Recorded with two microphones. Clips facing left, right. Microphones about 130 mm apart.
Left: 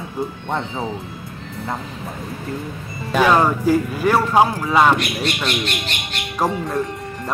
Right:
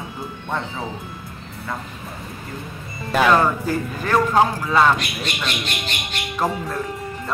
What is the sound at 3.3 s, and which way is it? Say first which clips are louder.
Speech: left 3 dB; 10° left (ahead or behind).